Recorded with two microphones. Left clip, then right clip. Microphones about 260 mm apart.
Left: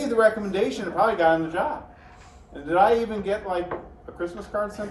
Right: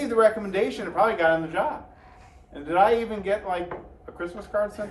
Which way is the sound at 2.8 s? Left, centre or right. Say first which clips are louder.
Even; right.